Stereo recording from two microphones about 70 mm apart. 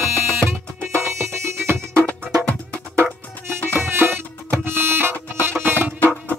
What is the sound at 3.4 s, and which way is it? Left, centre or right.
Music, right.